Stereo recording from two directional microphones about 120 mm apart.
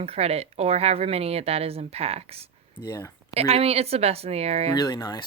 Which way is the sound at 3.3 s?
60° right (ahead or behind).